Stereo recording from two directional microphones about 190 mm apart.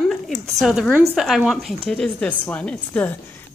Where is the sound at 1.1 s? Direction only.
Centre (ahead or behind).